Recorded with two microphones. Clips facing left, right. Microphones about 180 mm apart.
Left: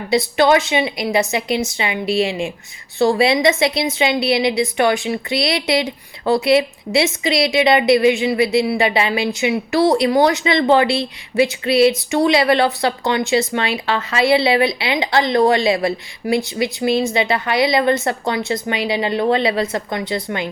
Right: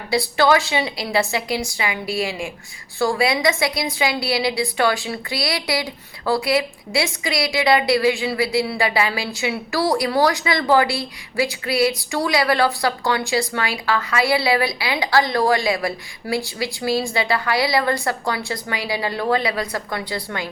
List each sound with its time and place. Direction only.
0.1 s a woman's voice: 20° left (ahead or behind)